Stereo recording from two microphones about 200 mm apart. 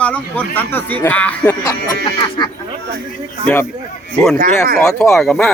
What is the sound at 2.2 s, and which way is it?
Speech, 25° left (ahead or behind).